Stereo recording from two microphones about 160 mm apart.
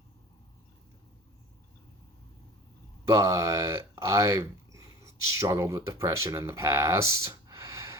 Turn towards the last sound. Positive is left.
turn(degrees=-20)  # may be behind; listen again after turning